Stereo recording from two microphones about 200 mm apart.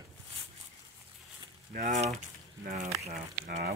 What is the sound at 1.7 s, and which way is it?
Speech, 45° right (ahead or behind).